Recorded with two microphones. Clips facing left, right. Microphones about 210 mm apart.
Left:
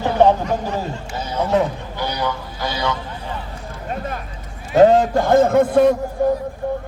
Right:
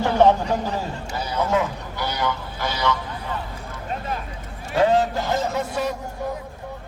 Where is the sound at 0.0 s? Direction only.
15° left (ahead or behind).